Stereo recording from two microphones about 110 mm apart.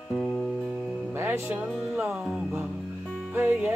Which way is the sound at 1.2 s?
20° right (ahead or behind).